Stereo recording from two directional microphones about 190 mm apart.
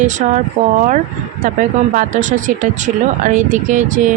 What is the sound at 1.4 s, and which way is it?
Speech, 40° right (ahead or behind).